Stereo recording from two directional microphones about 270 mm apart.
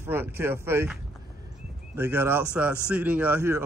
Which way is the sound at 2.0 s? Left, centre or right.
Centre.